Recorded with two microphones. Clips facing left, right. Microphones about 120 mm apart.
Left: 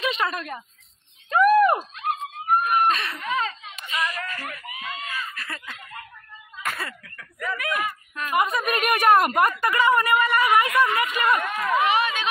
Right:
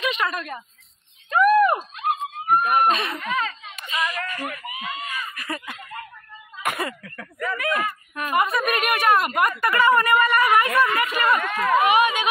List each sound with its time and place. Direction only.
0.0 s a woman's voice: 30° left (ahead or behind)
1.3 s a sound: 30° left (ahead or behind)
2.0 s dog: 15° right (ahead or behind)
2.4 s speech: 55° right (ahead or behind)
2.9 s speech: 20° right (ahead or behind)
3.3 s a sound: 25° left (ahead or behind)
3.8 s speech: 20° right (ahead or behind)
7.3 s speech: 5° left (ahead or behind)
8.1 s speech: 15° right (ahead or behind)
8.4 s speech: 15° left (ahead or behind)
8.6 s speech: 35° left (ahead or behind)
9.6 s speech: 15° left (ahead or behind)
11.8 s speech: 15° right (ahead or behind)